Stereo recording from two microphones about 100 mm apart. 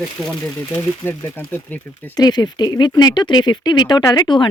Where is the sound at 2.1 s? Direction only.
40° left (ahead or behind).